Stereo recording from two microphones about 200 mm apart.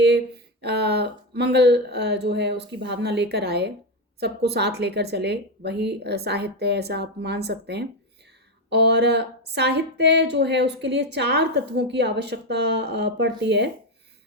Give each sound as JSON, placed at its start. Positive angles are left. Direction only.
{"t": 0.6, "sound": "speech", "side_deg": -55}